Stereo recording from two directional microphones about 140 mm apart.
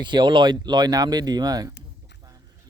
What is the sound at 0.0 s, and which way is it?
Speech, 35° right (ahead or behind).